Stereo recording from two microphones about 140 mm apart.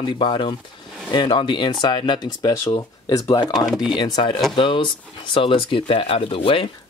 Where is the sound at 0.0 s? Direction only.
35° left (ahead or behind).